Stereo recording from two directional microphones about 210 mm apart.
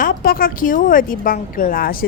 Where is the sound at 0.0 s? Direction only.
40° left (ahead or behind).